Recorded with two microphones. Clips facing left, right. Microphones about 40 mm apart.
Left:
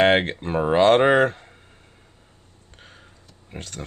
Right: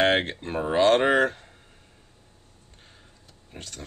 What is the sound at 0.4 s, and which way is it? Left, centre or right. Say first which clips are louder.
Speech: left 4 dB; left.